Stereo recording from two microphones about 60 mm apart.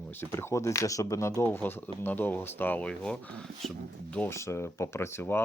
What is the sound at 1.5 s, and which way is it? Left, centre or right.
Speech, left.